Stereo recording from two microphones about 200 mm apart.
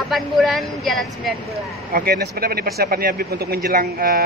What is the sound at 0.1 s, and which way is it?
Speech, centre (ahead or behind).